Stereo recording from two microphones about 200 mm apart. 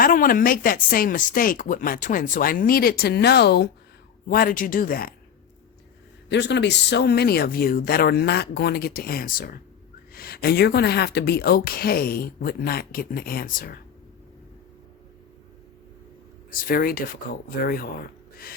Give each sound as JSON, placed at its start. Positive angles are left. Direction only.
{"t": 0.0, "sound": "speech", "side_deg": 45}
{"t": 6.3, "sound": "speech", "side_deg": 60}
{"t": 16.6, "sound": "speech", "side_deg": 50}